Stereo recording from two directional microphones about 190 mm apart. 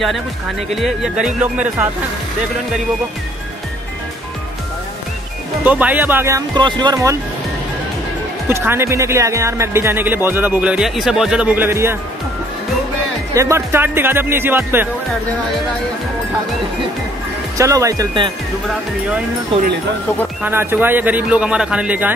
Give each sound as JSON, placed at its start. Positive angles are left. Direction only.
{"t": 0.7, "sound": "speech", "side_deg": 0}
{"t": 5.6, "sound": "speech", "side_deg": -10}
{"t": 8.5, "sound": "speech", "side_deg": -10}
{"t": 13.3, "sound": "speech", "side_deg": -15}
{"t": 17.6, "sound": "speech", "side_deg": -15}
{"t": 20.4, "sound": "speech", "side_deg": -10}